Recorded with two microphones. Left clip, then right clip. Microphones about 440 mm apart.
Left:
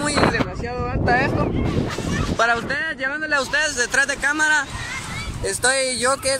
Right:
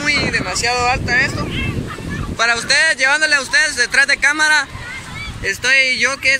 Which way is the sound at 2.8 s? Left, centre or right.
Right.